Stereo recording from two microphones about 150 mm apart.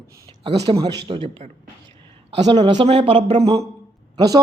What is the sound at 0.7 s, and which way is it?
A man's voice, 25° right (ahead or behind).